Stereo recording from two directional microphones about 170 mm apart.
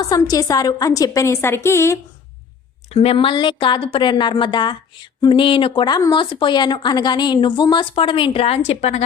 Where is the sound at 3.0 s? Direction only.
30° left (ahead or behind).